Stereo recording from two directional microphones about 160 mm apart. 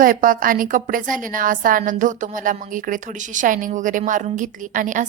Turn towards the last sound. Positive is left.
turn(degrees=-55)  # may be behind; listen again after turning